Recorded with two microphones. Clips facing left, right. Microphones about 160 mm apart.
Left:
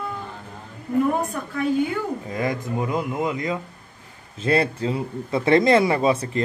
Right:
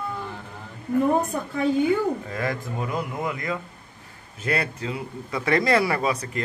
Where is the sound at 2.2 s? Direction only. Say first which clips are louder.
Left 3 dB; 20° left (ahead or behind).